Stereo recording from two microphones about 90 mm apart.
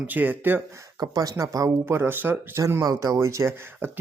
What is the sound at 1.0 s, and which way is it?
Speech, 45° right (ahead or behind).